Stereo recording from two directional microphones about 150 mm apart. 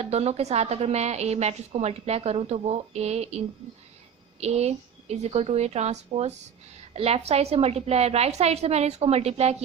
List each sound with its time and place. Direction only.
0.0 s a woman's voice: 45° right (ahead or behind)